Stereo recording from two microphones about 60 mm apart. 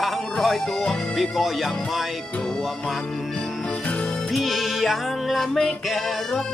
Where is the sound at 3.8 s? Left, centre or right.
Left.